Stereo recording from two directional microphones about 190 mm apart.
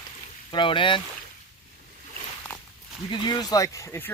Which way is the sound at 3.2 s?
20° left (ahead or behind).